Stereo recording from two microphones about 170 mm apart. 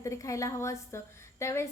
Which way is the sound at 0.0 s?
20° left (ahead or behind).